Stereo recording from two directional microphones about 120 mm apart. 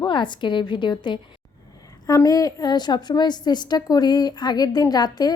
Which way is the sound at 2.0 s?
30° left (ahead or behind).